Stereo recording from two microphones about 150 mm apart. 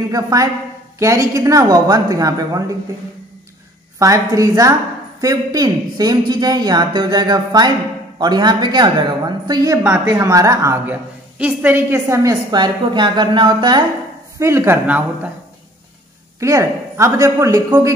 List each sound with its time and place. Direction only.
0.1 s a woman's voice: 25° right (ahead or behind)
4.0 s a woman's voice: 20° right (ahead or behind)
14.4 s speech: 15° right (ahead or behind)
16.3 s a woman's voice: 20° right (ahead or behind)